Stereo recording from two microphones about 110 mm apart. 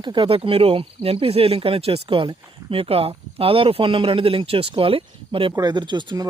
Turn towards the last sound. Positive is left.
turn(degrees=-40)  # may be behind; listen again after turning